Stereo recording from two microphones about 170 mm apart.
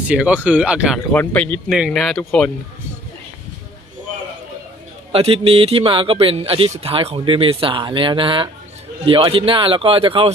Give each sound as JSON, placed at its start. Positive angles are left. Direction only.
{"t": 0.1, "sound": "speech", "side_deg": -10}
{"t": 1.1, "sound": "speech", "side_deg": 10}
{"t": 5.1, "sound": "speech", "side_deg": -35}